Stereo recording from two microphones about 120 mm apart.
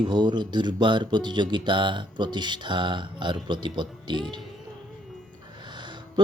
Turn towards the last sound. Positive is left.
turn(degrees=-40)  # may be behind; listen again after turning